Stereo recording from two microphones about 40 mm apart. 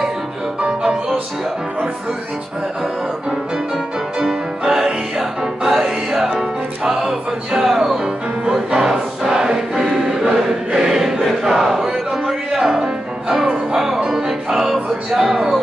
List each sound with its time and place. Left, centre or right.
4.2 s music: centre
9.3 s choir: centre
10.7 s a sound: centre
13.7 s music: centre